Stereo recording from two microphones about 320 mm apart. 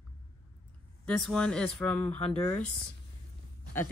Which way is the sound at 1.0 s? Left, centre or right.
Centre.